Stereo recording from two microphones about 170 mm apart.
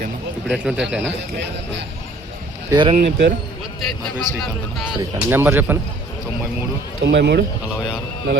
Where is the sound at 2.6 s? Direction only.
25° right (ahead or behind).